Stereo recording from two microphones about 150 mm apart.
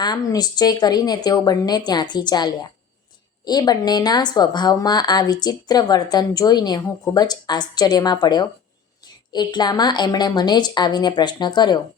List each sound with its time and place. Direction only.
0.0 s speech: 25° left (ahead or behind)